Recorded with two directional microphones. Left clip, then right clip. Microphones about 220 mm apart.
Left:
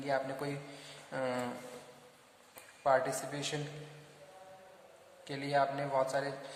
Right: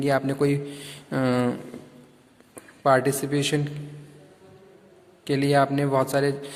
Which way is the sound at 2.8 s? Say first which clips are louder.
Right 10 dB; 45° right (ahead or behind).